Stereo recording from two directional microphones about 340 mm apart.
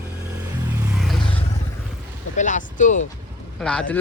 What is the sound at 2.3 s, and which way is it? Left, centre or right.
Speech, left.